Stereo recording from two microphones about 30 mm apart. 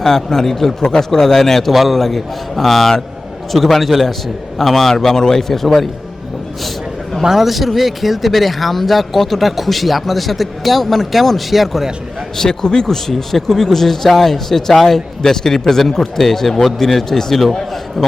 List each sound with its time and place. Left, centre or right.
0.0 s a man's voice: centre
6.6 s a sound: centre
7.2 s a man's voice: centre
12.4 s a man's voice: left
12.9 s speech: centre
17.5 s a sound: centre